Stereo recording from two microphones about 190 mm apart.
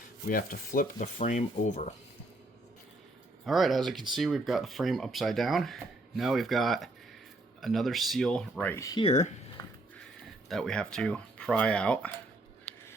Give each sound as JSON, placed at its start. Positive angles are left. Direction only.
{"t": 0.3, "sound": "stir", "side_deg": 45}
{"t": 3.4, "sound": "speech", "side_deg": 0}
{"t": 8.7, "sound": "speech", "side_deg": 20}
{"t": 9.0, "sound": "speech", "side_deg": 40}
{"t": 10.5, "sound": "speech", "side_deg": 5}